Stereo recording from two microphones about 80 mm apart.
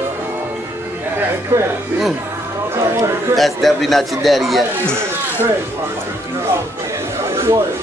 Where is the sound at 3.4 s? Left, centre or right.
Centre.